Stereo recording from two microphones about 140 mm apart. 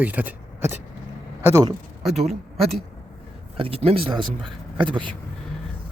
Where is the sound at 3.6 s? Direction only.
40° right (ahead or behind).